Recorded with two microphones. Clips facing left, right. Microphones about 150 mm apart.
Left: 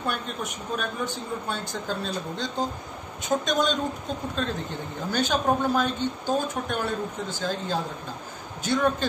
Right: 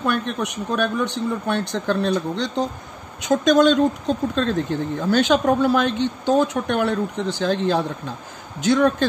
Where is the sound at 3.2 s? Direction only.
90° right.